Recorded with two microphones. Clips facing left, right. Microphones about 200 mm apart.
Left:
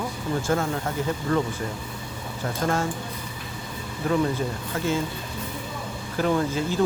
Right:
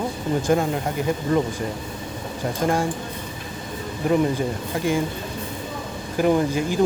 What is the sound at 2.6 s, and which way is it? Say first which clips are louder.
Speech: right 3 dB; 15° right (ahead or behind).